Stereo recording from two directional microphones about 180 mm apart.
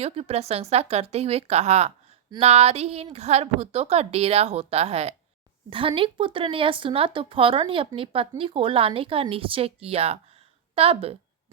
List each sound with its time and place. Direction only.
0.0 s a woman's voice: 35° right (ahead or behind)